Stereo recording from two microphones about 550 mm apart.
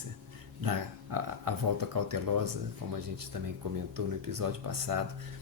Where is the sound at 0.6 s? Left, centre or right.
Right.